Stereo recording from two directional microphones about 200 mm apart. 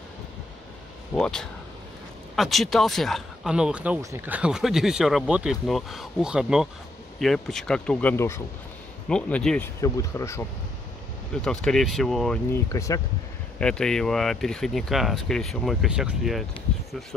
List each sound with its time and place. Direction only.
1.1 s speech: 5° left (ahead or behind)
11.4 s speech: centre (ahead or behind)
12.7 s speech: 15° left (ahead or behind)
13.6 s speech: 5° left (ahead or behind)